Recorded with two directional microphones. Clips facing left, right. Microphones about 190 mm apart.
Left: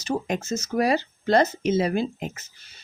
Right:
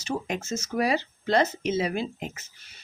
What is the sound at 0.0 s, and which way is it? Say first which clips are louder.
Speech: left 4 dB; 40° left (ahead or behind).